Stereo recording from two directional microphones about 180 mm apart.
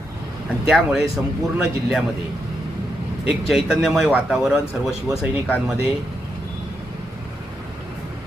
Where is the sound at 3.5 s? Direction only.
Centre (ahead or behind).